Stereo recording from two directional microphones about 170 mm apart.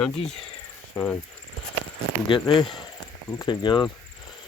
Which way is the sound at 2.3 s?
30° left (ahead or behind).